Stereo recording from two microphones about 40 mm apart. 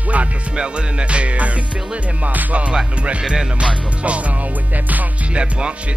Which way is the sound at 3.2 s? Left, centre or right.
Right.